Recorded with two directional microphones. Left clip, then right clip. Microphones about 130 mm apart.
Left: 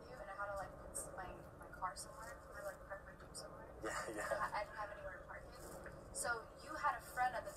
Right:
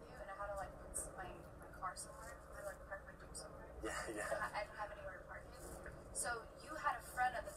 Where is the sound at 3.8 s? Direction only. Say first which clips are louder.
Left 1 dB; 60° left (ahead or behind).